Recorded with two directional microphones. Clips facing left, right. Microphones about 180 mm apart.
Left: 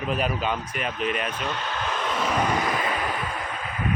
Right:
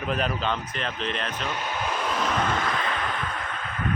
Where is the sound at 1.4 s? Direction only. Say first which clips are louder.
Even; 10° right (ahead or behind).